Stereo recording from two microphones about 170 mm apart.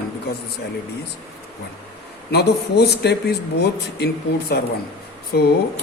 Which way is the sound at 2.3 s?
75° left (ahead or behind).